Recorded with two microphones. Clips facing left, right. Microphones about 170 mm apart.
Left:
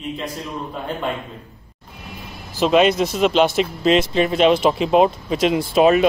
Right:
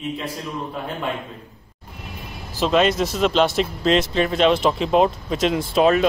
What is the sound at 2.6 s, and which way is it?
Speech, 10° left (ahead or behind).